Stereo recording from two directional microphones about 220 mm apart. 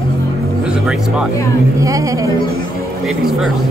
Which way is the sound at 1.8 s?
15° right (ahead or behind).